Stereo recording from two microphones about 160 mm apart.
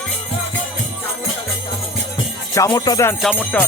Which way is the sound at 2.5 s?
20° left (ahead or behind).